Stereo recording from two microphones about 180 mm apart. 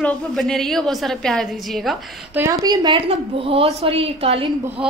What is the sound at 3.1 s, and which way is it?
A woman's voice, 30° right (ahead or behind).